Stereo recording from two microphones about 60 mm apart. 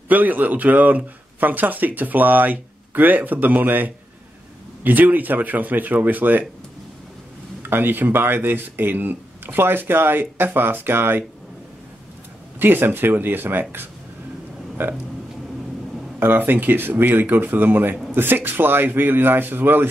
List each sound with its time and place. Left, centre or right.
0.1 s speech: right
7.6 s speech: right
12.5 s speech: right
16.2 s speech: right